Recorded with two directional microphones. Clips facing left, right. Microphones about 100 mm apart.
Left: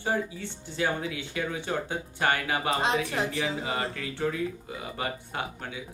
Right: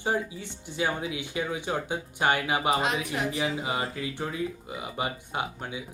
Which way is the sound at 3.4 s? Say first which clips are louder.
Right 1 dB; 15° right (ahead or behind).